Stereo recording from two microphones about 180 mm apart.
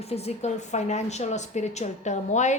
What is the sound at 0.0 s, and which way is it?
A woman's voice, 35° left (ahead or behind).